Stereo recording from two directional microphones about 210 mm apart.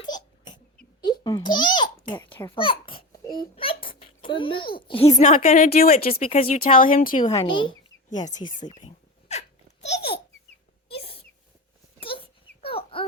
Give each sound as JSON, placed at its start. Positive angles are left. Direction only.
{"t": 0.0, "sound": "crying", "side_deg": 20}
{"t": 1.0, "sound": "a child's voice", "side_deg": 20}
{"t": 7.2, "sound": "speech", "side_deg": 20}
{"t": 8.6, "sound": "a sound", "side_deg": 25}
{"t": 9.8, "sound": "babbling", "side_deg": 30}
{"t": 11.9, "sound": "dog", "side_deg": 25}